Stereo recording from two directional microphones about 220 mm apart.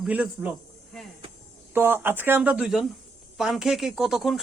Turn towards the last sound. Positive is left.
turn(degrees=0)  # may be behind; listen again after turning